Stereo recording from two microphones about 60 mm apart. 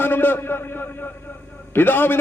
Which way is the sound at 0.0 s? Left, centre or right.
Left.